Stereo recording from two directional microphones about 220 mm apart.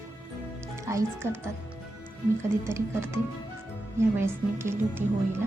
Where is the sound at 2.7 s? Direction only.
10° right (ahead or behind).